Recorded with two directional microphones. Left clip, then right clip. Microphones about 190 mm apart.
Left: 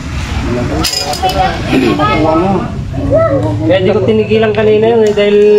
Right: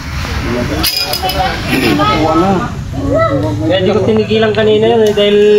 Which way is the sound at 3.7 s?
5° right (ahead or behind).